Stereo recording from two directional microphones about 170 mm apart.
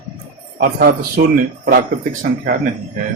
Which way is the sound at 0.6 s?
55° right (ahead or behind).